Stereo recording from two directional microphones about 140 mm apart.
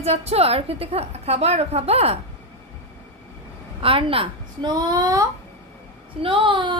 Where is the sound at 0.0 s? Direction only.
50° right (ahead or behind).